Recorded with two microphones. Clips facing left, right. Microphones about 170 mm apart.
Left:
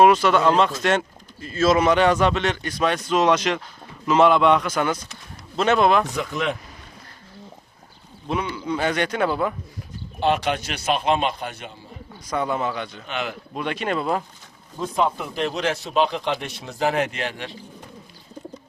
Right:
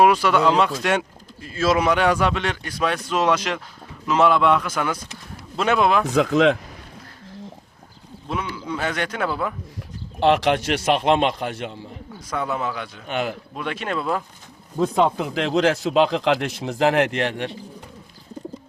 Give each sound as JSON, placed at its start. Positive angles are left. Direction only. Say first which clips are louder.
{"t": 0.0, "sound": "a man's voice", "louder": "left 1 dB", "side_deg": -5}
{"t": 6.1, "sound": "speech", "louder": "right 9 dB", "side_deg": -90}
{"t": 8.3, "sound": "a man's voice", "louder": "left 2 dB", "side_deg": 0}
{"t": 10.2, "sound": "a man's voice", "louder": "right 4 dB", "side_deg": -75}
{"t": 12.3, "sound": "a man's voice", "louder": "left 1 dB", "side_deg": 0}
{"t": 13.1, "sound": "a man's voice", "louder": "right 5 dB", "side_deg": -50}
{"t": 13.5, "sound": "a man's voice", "louder": "left 2 dB", "side_deg": 0}
{"t": 14.8, "sound": "speech", "louder": "right 4 dB", "side_deg": -85}